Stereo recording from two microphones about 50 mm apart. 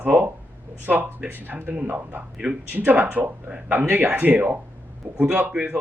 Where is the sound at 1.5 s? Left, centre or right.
Right.